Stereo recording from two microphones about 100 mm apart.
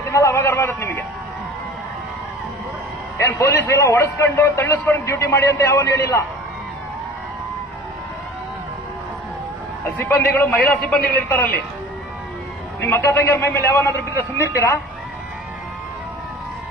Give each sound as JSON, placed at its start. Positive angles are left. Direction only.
{"t": 0.1, "sound": "a man's voice", "side_deg": 30}
{"t": 3.2, "sound": "a man's voice", "side_deg": 30}
{"t": 10.0, "sound": "a man's voice", "side_deg": 20}
{"t": 10.8, "sound": "a man's voice", "side_deg": 5}
{"t": 12.8, "sound": "a man's voice", "side_deg": 25}